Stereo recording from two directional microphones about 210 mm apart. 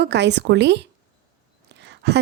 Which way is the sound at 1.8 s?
55° right (ahead or behind).